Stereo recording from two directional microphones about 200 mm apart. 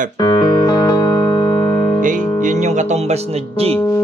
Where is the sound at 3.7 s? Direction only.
10° left (ahead or behind).